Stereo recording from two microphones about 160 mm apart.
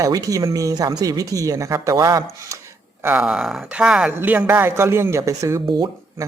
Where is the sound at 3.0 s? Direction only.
10° right (ahead or behind).